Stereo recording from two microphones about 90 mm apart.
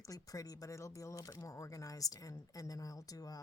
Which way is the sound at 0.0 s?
40° left (ahead or behind).